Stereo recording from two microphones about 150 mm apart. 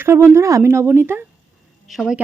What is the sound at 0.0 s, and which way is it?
Speech, 15° right (ahead or behind).